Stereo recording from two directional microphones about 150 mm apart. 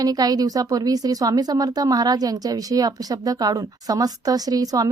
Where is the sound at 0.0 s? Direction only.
25° right (ahead or behind).